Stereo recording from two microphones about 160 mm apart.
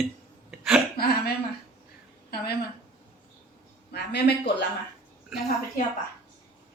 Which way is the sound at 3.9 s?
90° left.